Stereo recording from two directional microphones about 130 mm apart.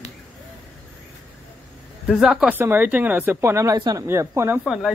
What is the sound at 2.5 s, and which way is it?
Speech, 15° right (ahead or behind).